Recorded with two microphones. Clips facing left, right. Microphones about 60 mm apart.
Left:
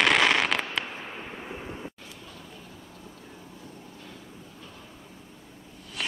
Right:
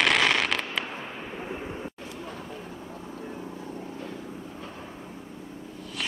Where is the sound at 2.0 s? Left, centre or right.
Right.